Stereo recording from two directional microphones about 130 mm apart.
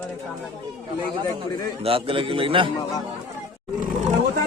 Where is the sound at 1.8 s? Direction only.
45° right (ahead or behind).